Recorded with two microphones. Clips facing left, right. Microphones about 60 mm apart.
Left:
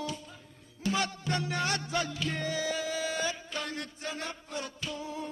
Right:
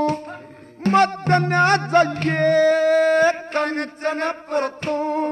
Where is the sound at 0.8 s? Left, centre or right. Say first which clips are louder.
Right 15 dB; right.